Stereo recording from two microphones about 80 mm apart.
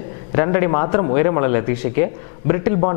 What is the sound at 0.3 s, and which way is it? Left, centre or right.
A man's voice, centre.